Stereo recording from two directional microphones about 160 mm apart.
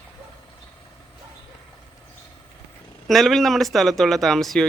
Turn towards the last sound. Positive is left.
turn(degrees=0)  # may be behind; listen again after turning